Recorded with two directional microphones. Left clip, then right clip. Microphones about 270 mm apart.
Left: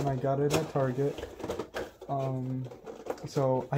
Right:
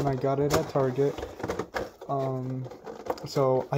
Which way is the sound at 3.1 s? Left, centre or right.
Centre.